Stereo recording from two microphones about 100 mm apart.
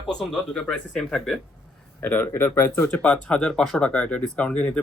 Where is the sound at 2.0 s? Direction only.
20° left (ahead or behind).